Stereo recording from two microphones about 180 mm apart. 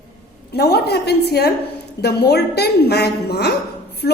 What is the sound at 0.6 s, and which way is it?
A woman's voice, 65° left (ahead or behind).